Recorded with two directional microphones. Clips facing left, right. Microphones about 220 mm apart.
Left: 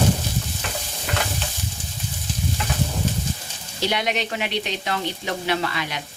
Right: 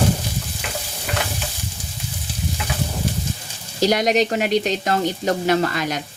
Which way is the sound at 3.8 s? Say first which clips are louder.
Right 7 dB; 40° right (ahead or behind).